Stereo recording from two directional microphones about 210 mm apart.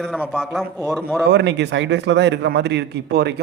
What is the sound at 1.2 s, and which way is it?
A man's voice, 55° right (ahead or behind).